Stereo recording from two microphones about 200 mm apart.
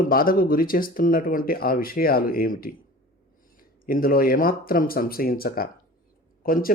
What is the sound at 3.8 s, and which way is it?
A man's voice, 45° left (ahead or behind).